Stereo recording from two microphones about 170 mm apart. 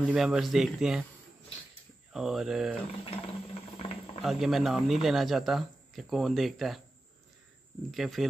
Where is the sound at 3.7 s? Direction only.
35° left (ahead or behind).